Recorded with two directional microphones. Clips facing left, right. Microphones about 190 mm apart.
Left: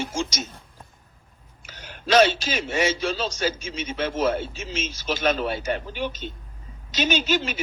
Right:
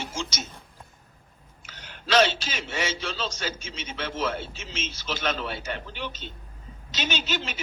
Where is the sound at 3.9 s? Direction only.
40° left (ahead or behind).